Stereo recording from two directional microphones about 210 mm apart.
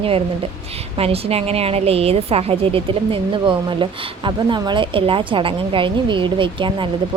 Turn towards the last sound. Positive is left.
turn(degrees=-25)  # may be behind; listen again after turning